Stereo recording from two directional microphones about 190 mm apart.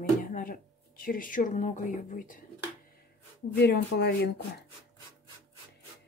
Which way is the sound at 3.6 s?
60° left (ahead or behind).